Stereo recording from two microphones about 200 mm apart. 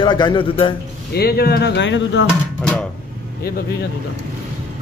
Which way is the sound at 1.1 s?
50° left (ahead or behind).